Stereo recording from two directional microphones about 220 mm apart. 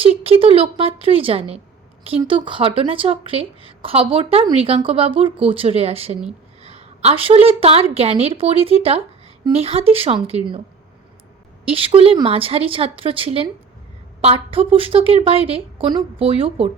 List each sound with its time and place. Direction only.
0.0 s a woman's voice: 25° right (ahead or behind)
11.6 s speech: 25° right (ahead or behind)